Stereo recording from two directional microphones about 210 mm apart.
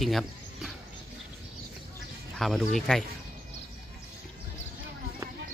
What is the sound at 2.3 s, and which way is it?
Speech, centre (ahead or behind).